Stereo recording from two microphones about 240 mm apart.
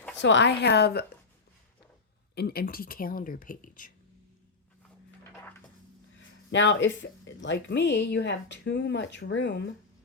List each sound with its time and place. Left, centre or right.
0.2 s speech: left
2.3 s speech: left
6.1 s speech: left